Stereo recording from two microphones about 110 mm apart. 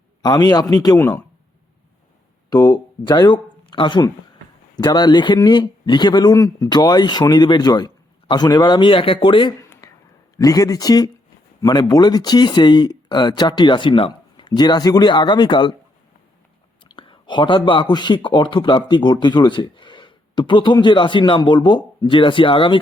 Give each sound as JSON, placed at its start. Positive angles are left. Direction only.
{"t": 0.2, "sound": "speech", "side_deg": 35}
{"t": 2.5, "sound": "speech", "side_deg": 40}
{"t": 9.8, "sound": "a sound", "side_deg": 30}
{"t": 10.3, "sound": "speech", "side_deg": 35}
{"t": 16.8, "sound": "speech", "side_deg": 50}